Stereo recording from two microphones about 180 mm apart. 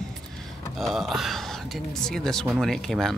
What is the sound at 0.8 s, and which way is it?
Speech, centre (ahead or behind).